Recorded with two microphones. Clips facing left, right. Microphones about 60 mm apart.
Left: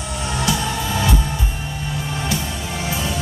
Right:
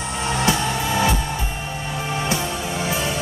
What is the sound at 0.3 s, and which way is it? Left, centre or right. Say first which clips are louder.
Music: right 1 dB; right.